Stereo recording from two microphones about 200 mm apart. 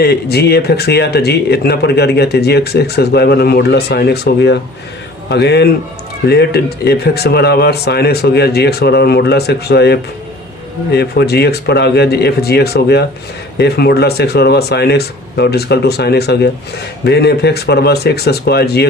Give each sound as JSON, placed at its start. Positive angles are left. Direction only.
{"t": 0.0, "sound": "speech", "side_deg": 55}